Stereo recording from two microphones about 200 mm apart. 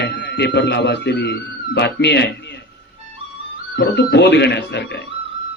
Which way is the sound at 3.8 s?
60° left (ahead or behind).